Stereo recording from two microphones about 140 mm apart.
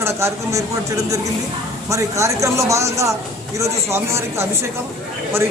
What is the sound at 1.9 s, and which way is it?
A man's voice, 20° right (ahead or behind).